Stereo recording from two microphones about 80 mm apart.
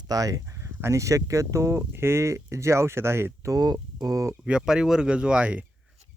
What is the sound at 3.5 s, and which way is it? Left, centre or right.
Speech, right.